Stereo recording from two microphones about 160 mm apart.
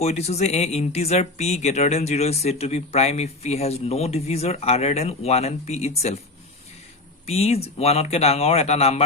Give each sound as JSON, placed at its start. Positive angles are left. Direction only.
{"t": 0.0, "sound": "speech", "side_deg": 40}
{"t": 7.3, "sound": "speech", "side_deg": 40}